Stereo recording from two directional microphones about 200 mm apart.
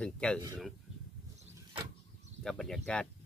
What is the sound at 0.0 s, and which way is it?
Speech, 5° left (ahead or behind).